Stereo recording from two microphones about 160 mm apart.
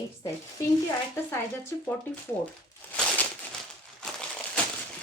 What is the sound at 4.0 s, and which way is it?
Crumpling, 5° left (ahead or behind).